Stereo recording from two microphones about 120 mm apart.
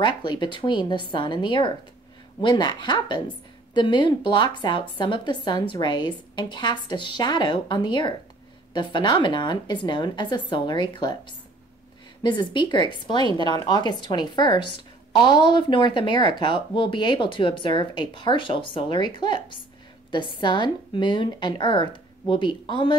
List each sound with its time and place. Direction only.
0.0 s a woman's voice: 40° left (ahead or behind)
12.2 s a woman's voice: 40° left (ahead or behind)